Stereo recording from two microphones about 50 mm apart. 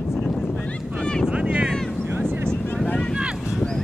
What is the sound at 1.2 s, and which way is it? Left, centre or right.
Boat, right.